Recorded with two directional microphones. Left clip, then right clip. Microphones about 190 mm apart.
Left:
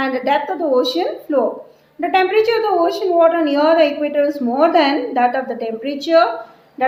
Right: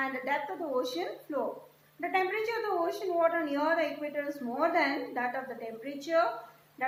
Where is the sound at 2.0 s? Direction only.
55° left (ahead or behind).